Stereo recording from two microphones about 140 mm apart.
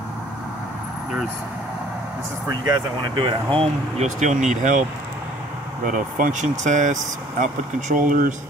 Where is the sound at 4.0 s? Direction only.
60° right (ahead or behind).